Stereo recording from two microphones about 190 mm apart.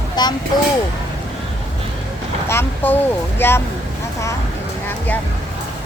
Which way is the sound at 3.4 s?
10° left (ahead or behind).